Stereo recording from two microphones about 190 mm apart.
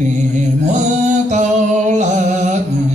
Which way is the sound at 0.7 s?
40° right (ahead or behind).